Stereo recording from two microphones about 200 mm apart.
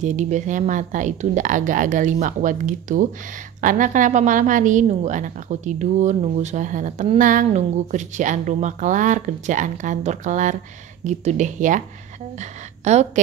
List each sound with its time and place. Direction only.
0.0 s a woman's voice: 35° right (ahead or behind)